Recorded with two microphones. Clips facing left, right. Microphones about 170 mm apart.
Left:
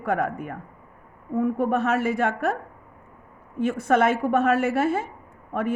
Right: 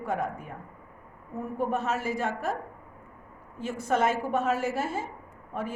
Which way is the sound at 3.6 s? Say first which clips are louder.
Left 6 dB; 60° left (ahead or behind).